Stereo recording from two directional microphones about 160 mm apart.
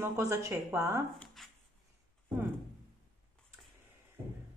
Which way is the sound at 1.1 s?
Centre (ahead or behind).